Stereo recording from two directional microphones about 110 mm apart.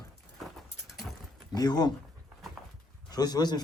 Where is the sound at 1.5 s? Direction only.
40° left (ahead or behind).